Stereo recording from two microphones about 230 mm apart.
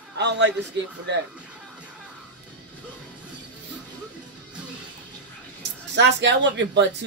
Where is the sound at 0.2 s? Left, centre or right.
Right.